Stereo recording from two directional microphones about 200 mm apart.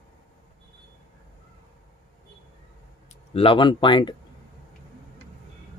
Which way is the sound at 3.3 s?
25° left (ahead or behind).